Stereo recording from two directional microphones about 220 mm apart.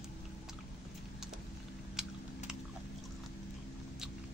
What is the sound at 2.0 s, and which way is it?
Typing, 5° right (ahead or behind).